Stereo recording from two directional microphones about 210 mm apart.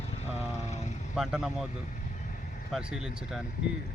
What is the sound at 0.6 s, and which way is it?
Speech, 30° left (ahead or behind).